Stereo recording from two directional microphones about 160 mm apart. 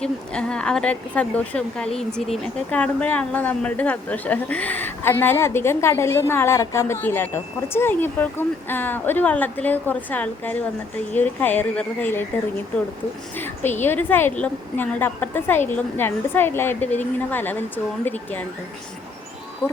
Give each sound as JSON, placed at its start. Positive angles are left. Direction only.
{"t": 0.0, "sound": "speech", "side_deg": 5}
{"t": 13.3, "sound": "speech", "side_deg": 10}
{"t": 19.6, "sound": "speech", "side_deg": 15}